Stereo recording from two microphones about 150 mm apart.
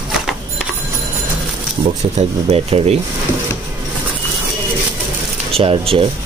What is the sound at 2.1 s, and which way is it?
Speech, 45° right (ahead or behind).